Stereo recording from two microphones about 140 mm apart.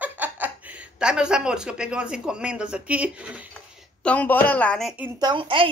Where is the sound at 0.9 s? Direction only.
5° right (ahead or behind).